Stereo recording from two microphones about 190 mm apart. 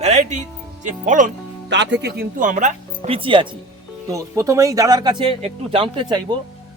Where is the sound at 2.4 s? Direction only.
40° right (ahead or behind).